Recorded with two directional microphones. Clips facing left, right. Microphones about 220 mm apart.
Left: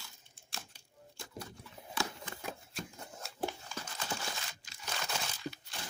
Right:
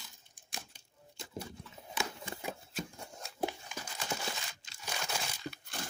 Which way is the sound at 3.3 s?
15° right (ahead or behind).